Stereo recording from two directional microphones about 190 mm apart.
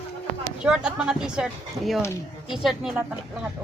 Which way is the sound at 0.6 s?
5° right (ahead or behind).